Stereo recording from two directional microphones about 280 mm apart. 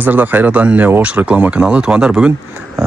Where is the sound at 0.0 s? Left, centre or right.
Centre.